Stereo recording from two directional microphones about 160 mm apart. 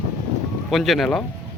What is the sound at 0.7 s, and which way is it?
Speech, centre (ahead or behind).